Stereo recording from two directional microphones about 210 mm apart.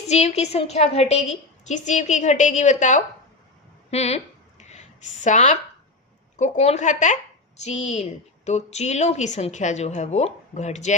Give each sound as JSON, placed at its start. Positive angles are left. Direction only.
{"t": 0.1, "sound": "a woman's voice", "side_deg": 30}
{"t": 4.6, "sound": "a sound", "side_deg": 35}
{"t": 6.3, "sound": "a woman's voice", "side_deg": 35}